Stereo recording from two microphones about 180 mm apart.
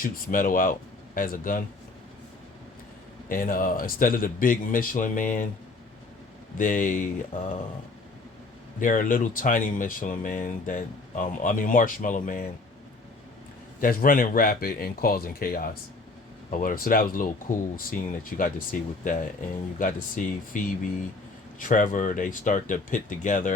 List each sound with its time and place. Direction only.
0.0 s speech: 50° left (ahead or behind)
3.2 s speech: 50° left (ahead or behind)
6.6 s speech: 45° left (ahead or behind)
8.8 s speech: 45° left (ahead or behind)
13.8 s speech: 50° left (ahead or behind)
21.6 s speech: 45° left (ahead or behind)